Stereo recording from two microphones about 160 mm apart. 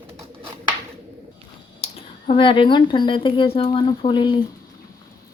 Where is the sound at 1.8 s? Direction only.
35° left (ahead or behind).